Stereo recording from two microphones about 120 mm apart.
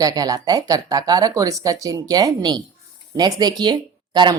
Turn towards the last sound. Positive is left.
turn(degrees=-40)  # may be behind; listen again after turning